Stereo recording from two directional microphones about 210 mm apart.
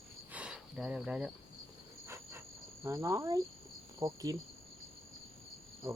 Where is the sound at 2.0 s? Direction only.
15° right (ahead or behind).